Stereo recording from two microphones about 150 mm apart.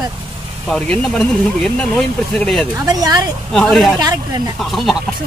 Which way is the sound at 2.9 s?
25° right (ahead or behind).